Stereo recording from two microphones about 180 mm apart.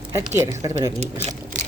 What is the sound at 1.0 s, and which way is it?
Speech, 35° right (ahead or behind).